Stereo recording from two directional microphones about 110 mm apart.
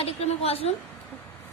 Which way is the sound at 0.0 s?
65° left (ahead or behind).